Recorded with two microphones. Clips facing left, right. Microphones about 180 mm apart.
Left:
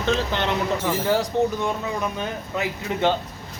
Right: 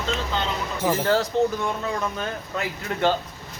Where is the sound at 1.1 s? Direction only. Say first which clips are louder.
Left 1 dB; 15° left (ahead or behind).